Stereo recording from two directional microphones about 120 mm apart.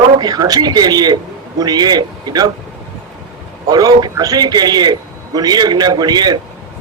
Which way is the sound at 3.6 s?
35° right (ahead or behind).